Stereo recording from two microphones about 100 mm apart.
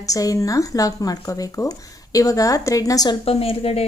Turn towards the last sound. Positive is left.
turn(degrees=75)  # may be behind; listen again after turning